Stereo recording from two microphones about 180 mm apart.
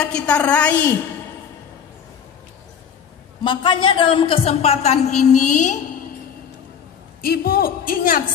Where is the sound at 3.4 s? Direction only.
25° left (ahead or behind).